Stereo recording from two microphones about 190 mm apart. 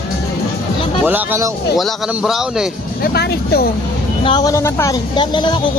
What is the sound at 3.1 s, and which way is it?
Speech, 55° left (ahead or behind).